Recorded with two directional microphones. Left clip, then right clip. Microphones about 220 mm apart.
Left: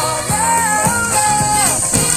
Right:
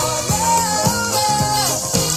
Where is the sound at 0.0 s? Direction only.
35° right (ahead or behind).